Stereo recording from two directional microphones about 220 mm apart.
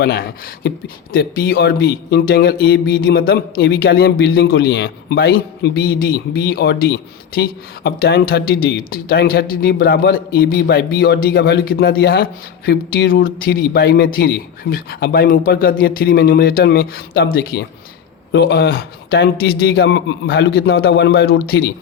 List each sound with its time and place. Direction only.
0.0 s speech: 45° left (ahead or behind)